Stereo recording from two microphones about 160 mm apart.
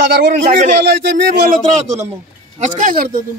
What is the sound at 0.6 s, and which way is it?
Speech, 75° right (ahead or behind).